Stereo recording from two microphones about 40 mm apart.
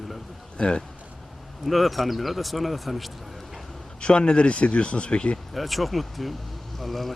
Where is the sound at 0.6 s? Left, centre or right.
Left.